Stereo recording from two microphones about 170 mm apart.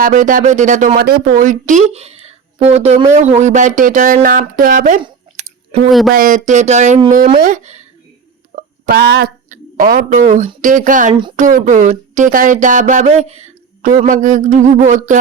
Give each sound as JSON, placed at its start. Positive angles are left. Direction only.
{"t": 0.0, "sound": "speech", "side_deg": -50}
{"t": 5.0, "sound": "chewing", "side_deg": -35}
{"t": 6.1, "sound": "speech", "side_deg": -50}
{"t": 8.9, "sound": "speech", "side_deg": -70}
{"t": 9.5, "sound": "speech", "side_deg": -55}